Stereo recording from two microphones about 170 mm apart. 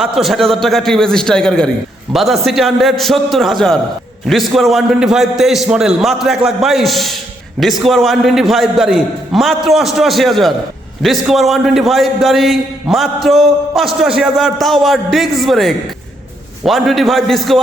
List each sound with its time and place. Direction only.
0.0 s a man's voice: centre (ahead or behind)